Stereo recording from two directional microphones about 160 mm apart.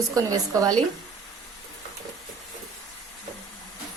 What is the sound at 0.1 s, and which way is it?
Speech, 20° right (ahead or behind).